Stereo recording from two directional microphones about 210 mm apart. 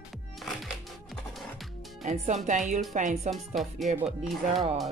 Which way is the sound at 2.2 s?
35° right (ahead or behind).